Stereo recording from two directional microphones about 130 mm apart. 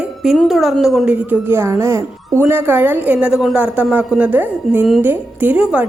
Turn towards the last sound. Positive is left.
turn(degrees=-10)  # may be behind; listen again after turning